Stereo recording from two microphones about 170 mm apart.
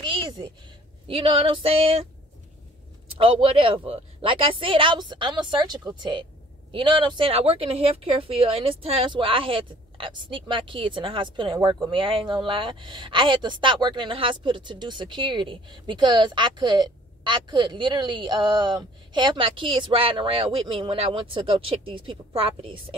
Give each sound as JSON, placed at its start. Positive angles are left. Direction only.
{"t": 0.0, "sound": "a sound", "side_deg": -25}
{"t": 1.0, "sound": "speech", "side_deg": -35}
{"t": 3.2, "sound": "speech", "side_deg": -30}